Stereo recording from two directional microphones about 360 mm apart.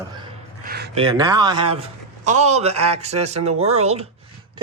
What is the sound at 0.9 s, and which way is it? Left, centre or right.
A man's voice, centre.